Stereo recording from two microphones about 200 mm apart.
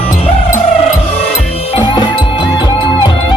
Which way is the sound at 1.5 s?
30° left (ahead or behind).